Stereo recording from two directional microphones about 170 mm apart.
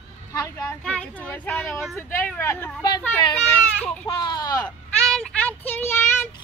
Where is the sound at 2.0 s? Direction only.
15° left (ahead or behind).